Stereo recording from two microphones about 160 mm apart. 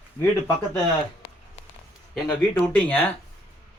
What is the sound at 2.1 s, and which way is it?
Speech, 10° left (ahead or behind).